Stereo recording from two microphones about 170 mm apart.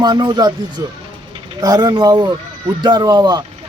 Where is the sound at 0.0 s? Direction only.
25° right (ahead or behind).